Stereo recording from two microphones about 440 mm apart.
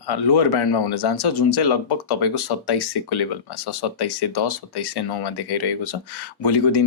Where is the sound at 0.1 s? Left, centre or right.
Left.